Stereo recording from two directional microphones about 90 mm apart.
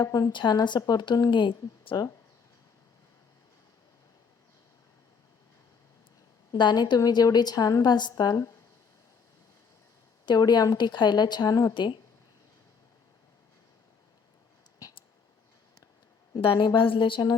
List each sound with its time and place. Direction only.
0.1 s speech: 50° left (ahead or behind); by 2.0 s 70° left (ahead or behind)
6.5 s a woman's voice: 50° left (ahead or behind)
10.2 s a woman's voice: 50° left (ahead or behind)
11.7 s speech: 55° left (ahead or behind)
16.4 s a woman's voice: 70° left (ahead or behind)